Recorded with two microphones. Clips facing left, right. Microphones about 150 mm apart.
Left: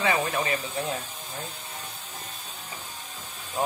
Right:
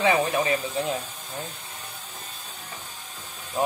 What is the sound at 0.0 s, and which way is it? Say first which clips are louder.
Speech: right 4 dB; 25° right (ahead or behind).